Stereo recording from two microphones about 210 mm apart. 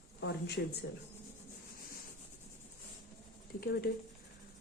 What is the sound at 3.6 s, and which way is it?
Speech, 45° left (ahead or behind).